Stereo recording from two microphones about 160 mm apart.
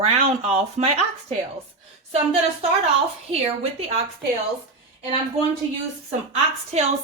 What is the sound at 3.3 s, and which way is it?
Speech, 40° right (ahead or behind).